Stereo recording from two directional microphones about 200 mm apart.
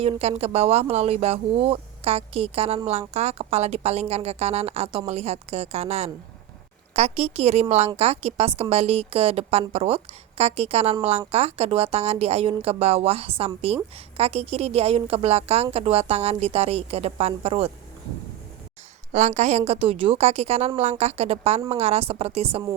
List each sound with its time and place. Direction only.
0.0 s a woman's voice: 30° right (ahead or behind)
19.1 s a woman's voice: 35° right (ahead or behind)